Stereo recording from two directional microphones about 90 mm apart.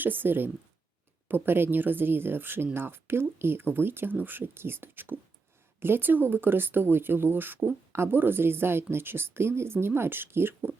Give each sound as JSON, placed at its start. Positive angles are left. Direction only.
{"t": 0.0, "sound": "speech", "side_deg": -20}